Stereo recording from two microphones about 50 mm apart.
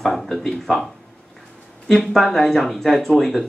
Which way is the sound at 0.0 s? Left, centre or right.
Centre.